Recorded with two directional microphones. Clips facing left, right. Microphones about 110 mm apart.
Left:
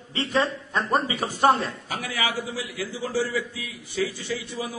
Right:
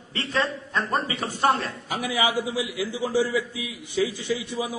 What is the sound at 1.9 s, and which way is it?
A man's voice, 15° right (ahead or behind).